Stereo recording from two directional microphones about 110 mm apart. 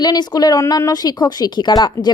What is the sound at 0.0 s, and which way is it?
A woman's voice, 40° left (ahead or behind).